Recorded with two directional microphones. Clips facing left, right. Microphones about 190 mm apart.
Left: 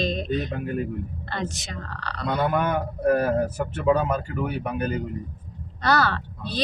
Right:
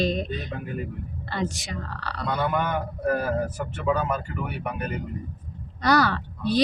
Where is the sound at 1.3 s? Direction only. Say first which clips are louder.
Right 3 dB; 10° right (ahead or behind).